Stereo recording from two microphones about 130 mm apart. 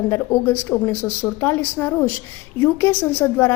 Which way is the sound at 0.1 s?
20° left (ahead or behind).